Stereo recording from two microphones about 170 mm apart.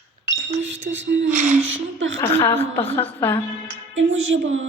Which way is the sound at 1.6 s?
90° right.